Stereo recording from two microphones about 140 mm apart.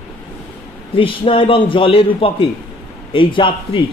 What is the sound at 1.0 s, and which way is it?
Speech, 40° left (ahead or behind).